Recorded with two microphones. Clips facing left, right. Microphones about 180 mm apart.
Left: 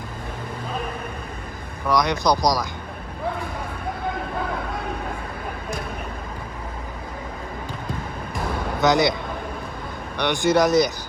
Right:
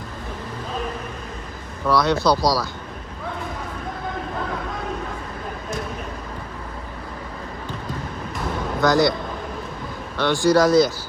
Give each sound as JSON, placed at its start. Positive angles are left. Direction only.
{"t": 1.9, "sound": "speech", "side_deg": 15}
{"t": 8.8, "sound": "speech", "side_deg": 20}
{"t": 10.2, "sound": "speech", "side_deg": 20}